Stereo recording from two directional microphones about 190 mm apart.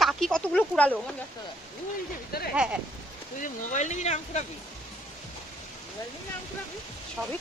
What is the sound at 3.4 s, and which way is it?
Speech, 40° left (ahead or behind).